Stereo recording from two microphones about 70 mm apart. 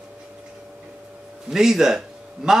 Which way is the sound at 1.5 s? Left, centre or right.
Centre.